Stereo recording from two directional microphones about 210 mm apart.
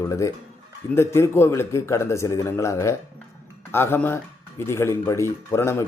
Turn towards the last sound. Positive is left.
turn(degrees=10)  # may be behind; listen again after turning